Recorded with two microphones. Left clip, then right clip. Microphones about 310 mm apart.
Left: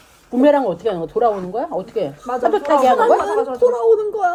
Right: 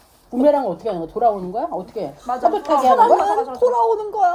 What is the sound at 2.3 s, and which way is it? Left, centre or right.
Speech, centre.